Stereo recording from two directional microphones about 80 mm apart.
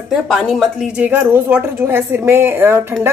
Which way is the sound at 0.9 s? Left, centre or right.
Right.